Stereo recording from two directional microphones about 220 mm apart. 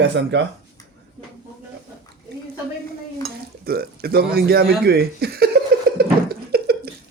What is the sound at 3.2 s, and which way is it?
Speech, 45° right (ahead or behind).